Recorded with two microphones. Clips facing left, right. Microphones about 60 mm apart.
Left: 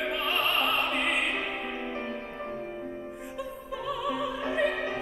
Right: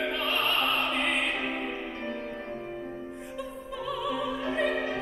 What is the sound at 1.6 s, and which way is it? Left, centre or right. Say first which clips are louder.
Music: left 1 dB; left.